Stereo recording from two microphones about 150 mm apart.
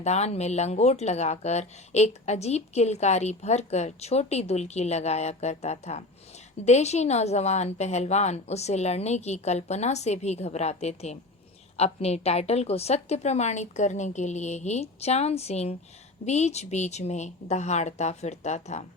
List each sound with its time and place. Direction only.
0.0 s speech: 45° left (ahead or behind)